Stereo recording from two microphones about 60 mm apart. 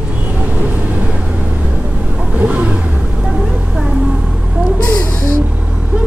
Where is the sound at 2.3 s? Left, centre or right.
Right.